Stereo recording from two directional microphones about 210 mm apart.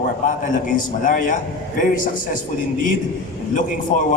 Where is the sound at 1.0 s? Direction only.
40° left (ahead or behind).